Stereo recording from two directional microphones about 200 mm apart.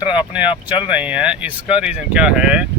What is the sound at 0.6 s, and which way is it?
Speech, 5° right (ahead or behind).